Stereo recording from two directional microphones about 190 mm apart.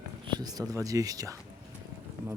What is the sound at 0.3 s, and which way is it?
Speech, 20° right (ahead or behind).